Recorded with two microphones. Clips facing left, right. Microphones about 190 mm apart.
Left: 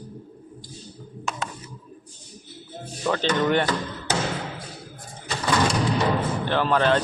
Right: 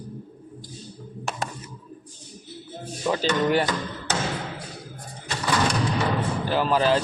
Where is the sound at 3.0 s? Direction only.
10° right (ahead or behind).